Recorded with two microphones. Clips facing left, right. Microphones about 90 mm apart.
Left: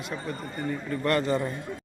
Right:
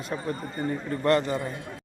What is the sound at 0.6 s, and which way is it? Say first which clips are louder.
Speech: right 2 dB; 25° right (ahead or behind).